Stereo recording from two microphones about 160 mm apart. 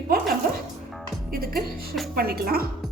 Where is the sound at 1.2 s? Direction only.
70° right (ahead or behind).